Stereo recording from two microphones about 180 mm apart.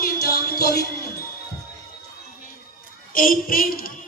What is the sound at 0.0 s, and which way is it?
Music, 55° left (ahead or behind).